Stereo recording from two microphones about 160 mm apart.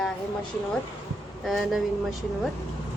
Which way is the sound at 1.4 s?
Centre (ahead or behind).